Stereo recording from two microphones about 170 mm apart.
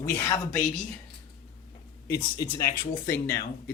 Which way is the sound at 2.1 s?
15° left (ahead or behind).